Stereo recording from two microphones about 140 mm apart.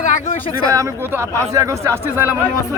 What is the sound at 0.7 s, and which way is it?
A man's voice, 20° right (ahead or behind).